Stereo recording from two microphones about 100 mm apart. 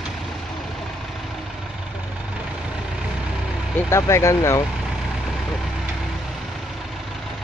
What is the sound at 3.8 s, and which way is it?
Speech, 30° left (ahead or behind).